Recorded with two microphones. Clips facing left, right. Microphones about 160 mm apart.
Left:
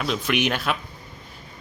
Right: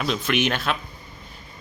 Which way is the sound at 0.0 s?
5° left (ahead or behind).